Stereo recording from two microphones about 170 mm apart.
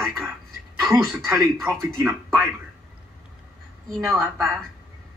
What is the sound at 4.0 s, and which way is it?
Speech, 15° right (ahead or behind).